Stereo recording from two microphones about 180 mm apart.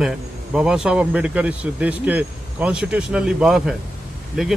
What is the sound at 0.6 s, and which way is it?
Speech, 5° right (ahead or behind).